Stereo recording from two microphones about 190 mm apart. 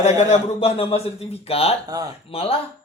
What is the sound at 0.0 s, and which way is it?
A man's voice, 35° left (ahead or behind).